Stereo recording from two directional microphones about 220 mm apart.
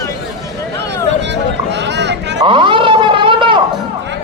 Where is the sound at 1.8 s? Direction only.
50° right (ahead or behind).